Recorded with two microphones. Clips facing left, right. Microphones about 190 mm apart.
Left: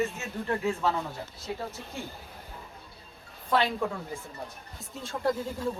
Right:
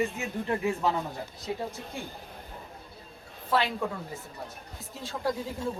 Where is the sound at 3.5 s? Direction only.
5° right (ahead or behind).